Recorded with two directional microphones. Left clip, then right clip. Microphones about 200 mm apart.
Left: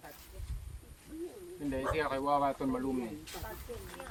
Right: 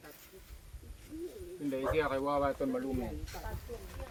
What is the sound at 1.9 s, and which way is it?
Speech, 25° left (ahead or behind).